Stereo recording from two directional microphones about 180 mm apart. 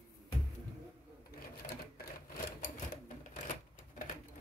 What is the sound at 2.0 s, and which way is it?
Typewriter, 50° left (ahead or behind).